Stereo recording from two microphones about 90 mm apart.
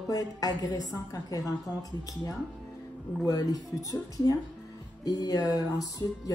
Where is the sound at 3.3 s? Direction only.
45° left (ahead or behind).